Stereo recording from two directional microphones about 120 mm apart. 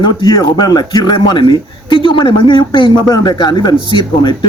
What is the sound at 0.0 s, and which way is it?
A man's voice, 35° left (ahead or behind).